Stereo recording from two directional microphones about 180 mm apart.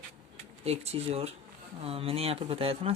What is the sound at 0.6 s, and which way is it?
Speech, 35° right (ahead or behind).